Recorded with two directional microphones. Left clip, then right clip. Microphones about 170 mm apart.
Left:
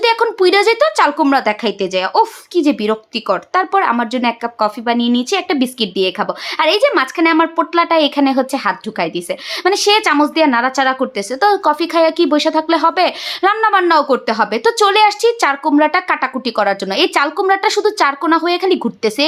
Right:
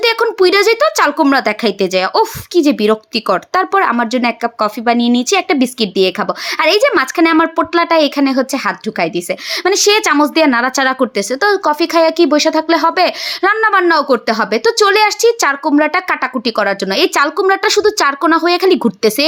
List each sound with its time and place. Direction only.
0.0 s a woman's voice: 20° right (ahead or behind)